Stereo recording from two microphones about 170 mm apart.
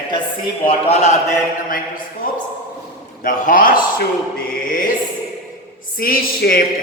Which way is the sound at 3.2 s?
50° left (ahead or behind).